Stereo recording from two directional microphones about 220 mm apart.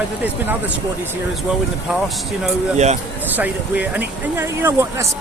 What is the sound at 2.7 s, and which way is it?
Speech, 30° right (ahead or behind).